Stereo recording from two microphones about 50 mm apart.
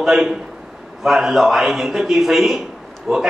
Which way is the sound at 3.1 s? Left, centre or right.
Centre.